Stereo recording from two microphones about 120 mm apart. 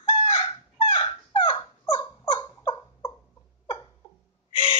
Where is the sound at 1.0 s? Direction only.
45° left (ahead or behind).